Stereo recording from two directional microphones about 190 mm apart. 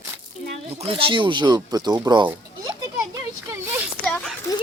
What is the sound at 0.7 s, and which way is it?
Speech, 30° right (ahead or behind).